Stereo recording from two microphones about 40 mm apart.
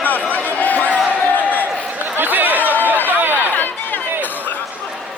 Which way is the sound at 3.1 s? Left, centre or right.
Right.